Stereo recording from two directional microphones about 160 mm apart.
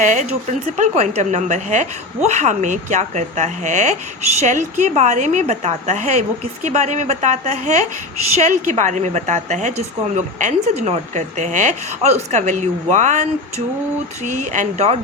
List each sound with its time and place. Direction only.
0.0 s a woman's voice: 50° right (ahead or behind)
14.3 s a woman's voice: 50° right (ahead or behind)